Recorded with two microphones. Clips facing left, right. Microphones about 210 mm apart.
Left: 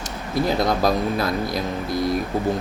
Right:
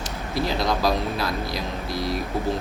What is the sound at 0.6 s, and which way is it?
Speech, 50° left (ahead or behind).